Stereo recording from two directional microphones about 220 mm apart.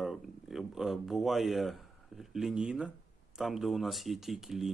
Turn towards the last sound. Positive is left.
turn(degrees=0)  # may be behind; listen again after turning